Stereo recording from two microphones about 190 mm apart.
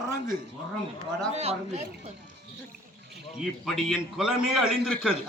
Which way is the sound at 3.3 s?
Centre (ahead or behind).